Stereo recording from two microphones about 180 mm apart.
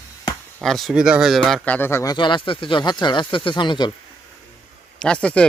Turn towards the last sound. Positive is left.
turn(degrees=5)  # may be behind; listen again after turning